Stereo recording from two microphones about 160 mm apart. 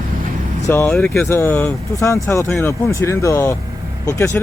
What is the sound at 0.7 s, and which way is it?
Speech, 10° left (ahead or behind).